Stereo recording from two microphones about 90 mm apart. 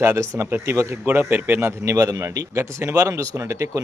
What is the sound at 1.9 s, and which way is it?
Speech, 40° right (ahead or behind).